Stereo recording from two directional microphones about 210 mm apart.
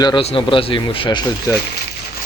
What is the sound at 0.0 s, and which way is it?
Speech, 25° left (ahead or behind).